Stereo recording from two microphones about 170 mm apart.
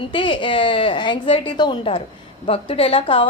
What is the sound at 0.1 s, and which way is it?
A woman's voice, 30° left (ahead or behind).